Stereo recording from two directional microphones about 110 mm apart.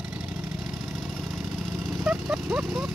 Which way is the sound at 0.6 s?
Centre (ahead or behind).